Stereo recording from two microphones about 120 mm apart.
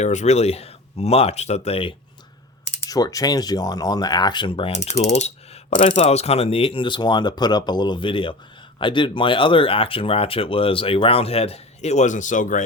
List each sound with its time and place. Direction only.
0.0 s speech: 75° left (ahead or behind); by 2.0 s 50° left (ahead or behind)
2.9 s speech: 30° left (ahead or behind)
4.9 s speech: 65° left (ahead or behind); by 12.6 s 90° left